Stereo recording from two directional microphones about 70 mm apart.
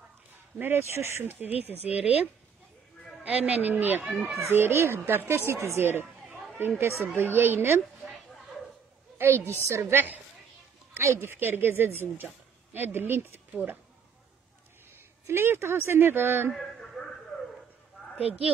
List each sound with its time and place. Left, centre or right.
0.6 s speech: right
3.3 s a child's voice: right
9.4 s a woman's voice: left
9.8 s a child's voice: right
15.2 s a child's voice: right
16.5 s a sound: centre